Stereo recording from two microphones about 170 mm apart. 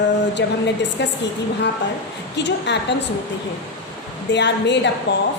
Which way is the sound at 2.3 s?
90° left.